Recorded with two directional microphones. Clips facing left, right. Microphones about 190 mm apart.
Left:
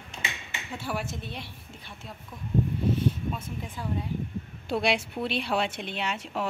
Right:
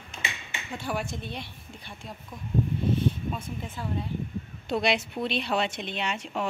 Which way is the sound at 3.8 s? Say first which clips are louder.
Left 1 dB; 10° left (ahead or behind).